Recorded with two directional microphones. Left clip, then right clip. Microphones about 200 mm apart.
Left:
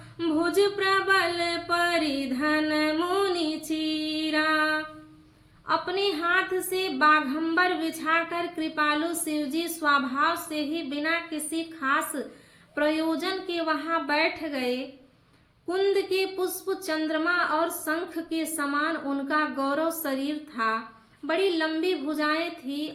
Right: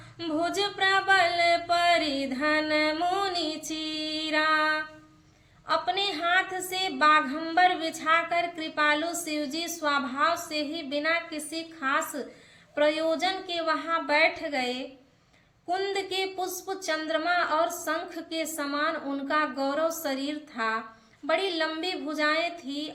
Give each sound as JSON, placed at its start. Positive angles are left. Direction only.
{"t": 0.2, "sound": "a woman's voice", "side_deg": -20}
{"t": 3.7, "sound": "female singing", "side_deg": -20}
{"t": 5.6, "sound": "a woman's voice", "side_deg": -15}
{"t": 15.9, "sound": "a woman's voice", "side_deg": -15}